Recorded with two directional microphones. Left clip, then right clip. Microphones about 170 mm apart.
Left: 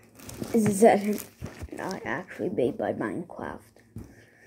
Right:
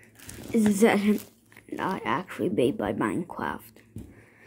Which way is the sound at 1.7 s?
35° right (ahead or behind).